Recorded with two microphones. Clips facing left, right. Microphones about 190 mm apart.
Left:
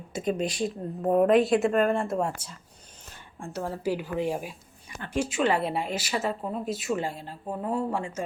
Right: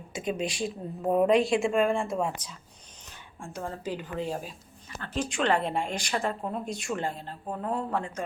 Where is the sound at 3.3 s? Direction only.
5° left (ahead or behind).